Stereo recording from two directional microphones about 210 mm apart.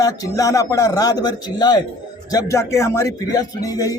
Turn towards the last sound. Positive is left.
turn(degrees=15)  # may be behind; listen again after turning